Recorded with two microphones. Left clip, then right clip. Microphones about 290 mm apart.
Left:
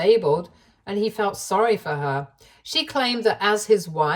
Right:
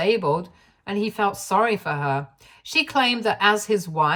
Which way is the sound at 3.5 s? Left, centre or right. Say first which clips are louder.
Left 4 dB; right.